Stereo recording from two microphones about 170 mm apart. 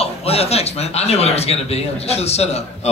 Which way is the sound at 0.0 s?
35° left (ahead or behind).